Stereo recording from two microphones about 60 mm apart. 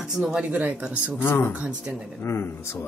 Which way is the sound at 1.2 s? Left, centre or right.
Left.